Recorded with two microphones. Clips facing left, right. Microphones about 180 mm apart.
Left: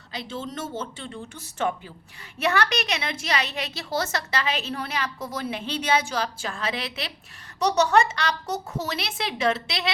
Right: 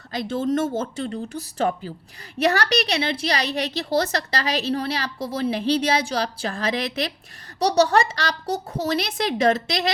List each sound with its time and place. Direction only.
0.1 s a woman's voice: 50° right (ahead or behind)